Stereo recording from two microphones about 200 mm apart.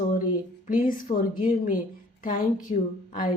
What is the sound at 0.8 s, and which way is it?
A woman's voice, 45° left (ahead or behind).